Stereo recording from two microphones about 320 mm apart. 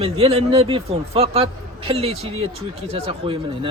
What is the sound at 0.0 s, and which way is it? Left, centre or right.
Speech, centre.